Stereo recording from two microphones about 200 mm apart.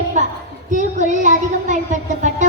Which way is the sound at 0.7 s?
40° right (ahead or behind).